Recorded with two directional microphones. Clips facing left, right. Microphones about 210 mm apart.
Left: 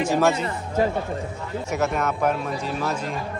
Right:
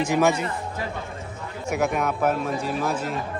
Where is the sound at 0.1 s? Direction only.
15° right (ahead or behind).